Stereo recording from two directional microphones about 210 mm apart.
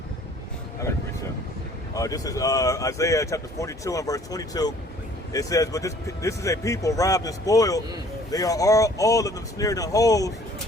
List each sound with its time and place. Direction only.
1.9 s speech: 15° left (ahead or behind)